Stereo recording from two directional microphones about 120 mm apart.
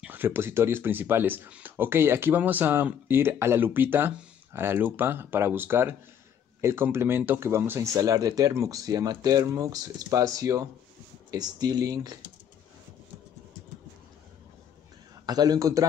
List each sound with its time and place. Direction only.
0.0 s speech: 15° right (ahead or behind); by 12.2 s 30° right (ahead or behind)
15.2 s speech: 35° right (ahead or behind)